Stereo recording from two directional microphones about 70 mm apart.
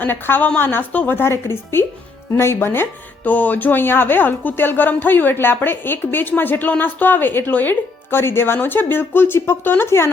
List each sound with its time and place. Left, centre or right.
0.0 s speech: left
3.2 s speech: left